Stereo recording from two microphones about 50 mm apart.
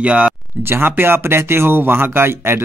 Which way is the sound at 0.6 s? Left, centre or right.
Right.